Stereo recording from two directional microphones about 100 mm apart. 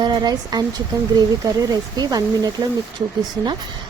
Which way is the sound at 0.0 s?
40° right (ahead or behind).